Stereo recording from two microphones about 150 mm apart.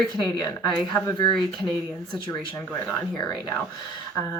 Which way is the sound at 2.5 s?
15° left (ahead or behind).